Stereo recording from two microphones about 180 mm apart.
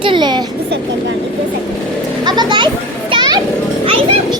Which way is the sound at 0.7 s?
90° right.